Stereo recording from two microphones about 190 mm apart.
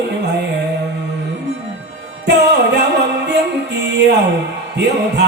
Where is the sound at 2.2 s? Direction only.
60° right (ahead or behind).